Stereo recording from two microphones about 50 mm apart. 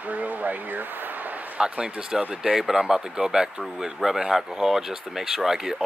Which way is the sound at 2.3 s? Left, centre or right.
Centre.